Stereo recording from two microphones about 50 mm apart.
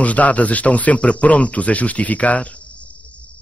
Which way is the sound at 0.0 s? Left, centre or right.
Left.